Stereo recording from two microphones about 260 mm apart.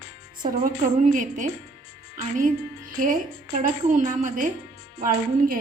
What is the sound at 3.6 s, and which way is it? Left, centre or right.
A woman's voice, right.